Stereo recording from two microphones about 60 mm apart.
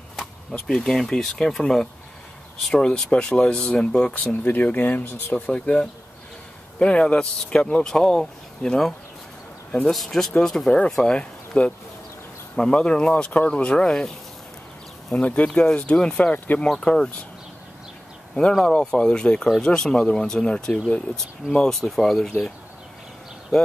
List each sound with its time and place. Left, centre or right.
0.7 s speech: centre
2.7 s speech: centre
4.2 s speech: left
5.3 s speech: centre
15.1 s speech: left
18.5 s speech: centre
23.5 s speech: centre